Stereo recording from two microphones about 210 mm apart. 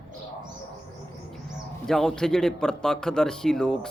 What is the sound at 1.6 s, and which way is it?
A man's voice, centre (ahead or behind).